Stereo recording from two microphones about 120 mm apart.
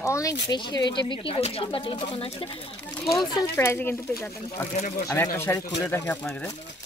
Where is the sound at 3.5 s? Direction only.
20° left (ahead or behind).